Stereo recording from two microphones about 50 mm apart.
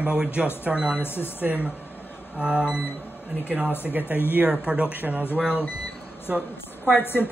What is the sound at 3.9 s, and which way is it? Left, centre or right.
Speech, right.